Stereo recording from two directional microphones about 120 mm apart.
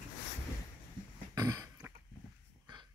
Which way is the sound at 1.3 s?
30° right (ahead or behind).